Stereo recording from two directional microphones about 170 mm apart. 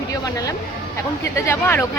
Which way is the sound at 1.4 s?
15° left (ahead or behind).